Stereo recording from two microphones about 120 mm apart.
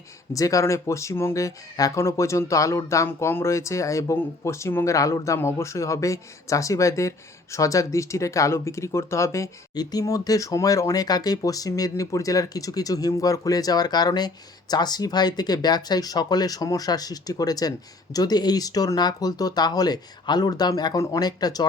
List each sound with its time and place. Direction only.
0.3 s speech: 25° left (ahead or behind)